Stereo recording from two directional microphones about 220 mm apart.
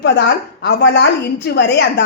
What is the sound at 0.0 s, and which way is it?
A woman's voice, 50° left (ahead or behind).